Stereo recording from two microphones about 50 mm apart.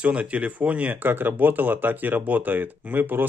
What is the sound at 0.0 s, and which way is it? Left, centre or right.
Speech, right.